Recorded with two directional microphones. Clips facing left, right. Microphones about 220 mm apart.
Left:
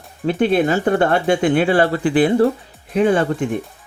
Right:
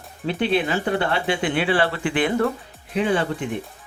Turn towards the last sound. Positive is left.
turn(degrees=45)  # may be behind; listen again after turning